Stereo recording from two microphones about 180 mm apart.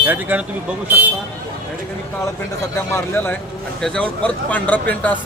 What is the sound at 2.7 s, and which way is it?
Speech, 15° left (ahead or behind).